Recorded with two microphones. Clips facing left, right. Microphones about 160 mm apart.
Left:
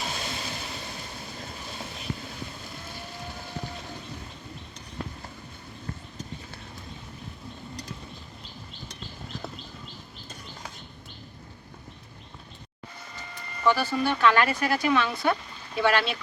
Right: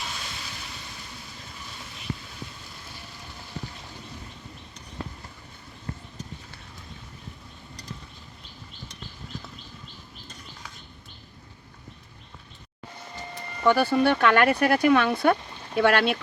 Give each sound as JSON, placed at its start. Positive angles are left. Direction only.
{"t": 0.0, "sound": "vehicle", "side_deg": 40}
{"t": 13.7, "sound": "speech", "side_deg": -55}